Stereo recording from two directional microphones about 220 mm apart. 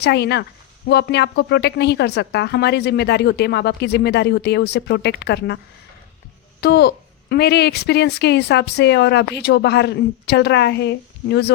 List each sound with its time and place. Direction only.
0.0 s speech: 50° left (ahead or behind)
6.6 s speech: 45° left (ahead or behind)